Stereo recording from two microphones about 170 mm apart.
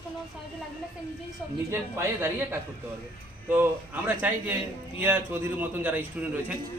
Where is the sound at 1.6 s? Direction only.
15° right (ahead or behind).